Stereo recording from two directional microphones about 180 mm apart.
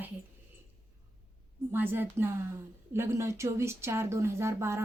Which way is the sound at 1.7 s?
10° right (ahead or behind).